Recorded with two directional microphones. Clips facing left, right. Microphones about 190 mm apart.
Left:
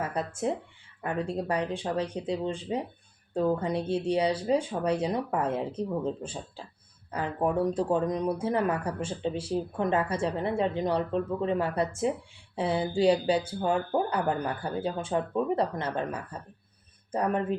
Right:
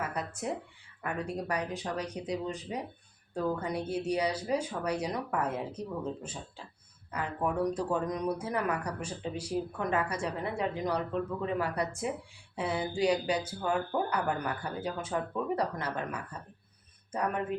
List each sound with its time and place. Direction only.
0.0 s speech: 30° left (ahead or behind)